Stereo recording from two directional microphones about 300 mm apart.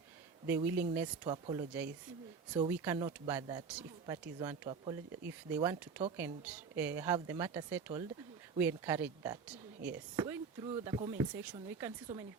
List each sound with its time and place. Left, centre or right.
0.4 s a woman's voice: centre
2.6 s a woman's voice: centre